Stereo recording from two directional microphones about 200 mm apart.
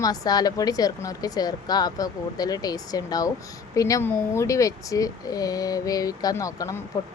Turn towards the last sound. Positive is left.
turn(degrees=15)  # may be behind; listen again after turning